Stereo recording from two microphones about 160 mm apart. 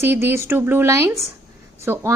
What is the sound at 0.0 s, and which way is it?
A woman's voice, 15° right (ahead or behind).